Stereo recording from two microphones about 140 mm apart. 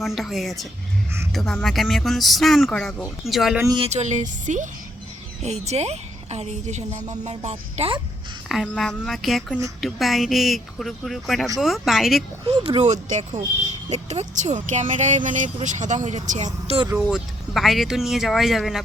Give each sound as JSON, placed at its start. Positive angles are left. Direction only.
{"t": 0.0, "sound": "speech", "side_deg": 0}
{"t": 3.8, "sound": "speech", "side_deg": -50}
{"t": 5.4, "sound": "a woman's voice", "side_deg": -50}
{"t": 7.5, "sound": "speech", "side_deg": -40}
{"t": 8.4, "sound": "speech", "side_deg": 0}
{"t": 12.5, "sound": "a woman's voice", "side_deg": -45}
{"t": 17.1, "sound": "speech", "side_deg": 0}